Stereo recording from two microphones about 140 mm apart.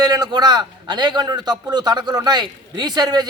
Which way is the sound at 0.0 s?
30° right (ahead or behind).